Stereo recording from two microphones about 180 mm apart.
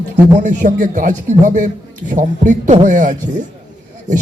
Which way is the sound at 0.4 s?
45° right (ahead or behind).